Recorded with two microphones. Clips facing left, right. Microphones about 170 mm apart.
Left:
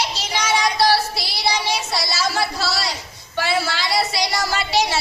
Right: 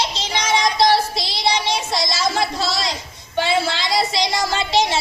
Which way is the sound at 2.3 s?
20° right (ahead or behind).